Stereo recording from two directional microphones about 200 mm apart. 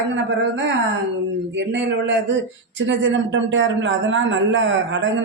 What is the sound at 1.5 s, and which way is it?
A man's voice, 65° right (ahead or behind).